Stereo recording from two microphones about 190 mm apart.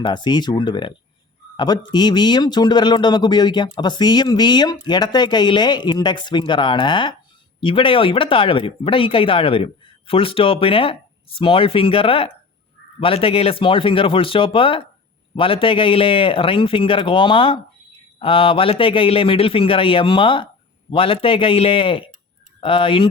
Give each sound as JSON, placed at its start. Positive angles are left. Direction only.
{"t": 0.0, "sound": "speech", "side_deg": 25}